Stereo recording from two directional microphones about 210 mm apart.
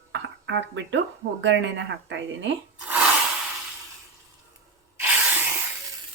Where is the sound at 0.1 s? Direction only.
60° right (ahead or behind).